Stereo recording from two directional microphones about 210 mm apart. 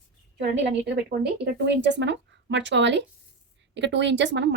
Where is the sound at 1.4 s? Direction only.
55° right (ahead or behind).